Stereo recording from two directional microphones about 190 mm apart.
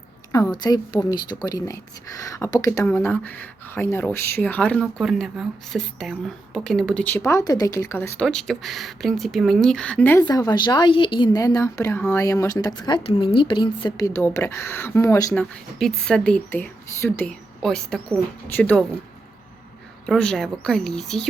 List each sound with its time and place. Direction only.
0.3 s speech: 15° left (ahead or behind)
10.2 s speech: 20° left (ahead or behind)
15.8 s speech: 5° left (ahead or behind)
20.1 s speech: 5° left (ahead or behind)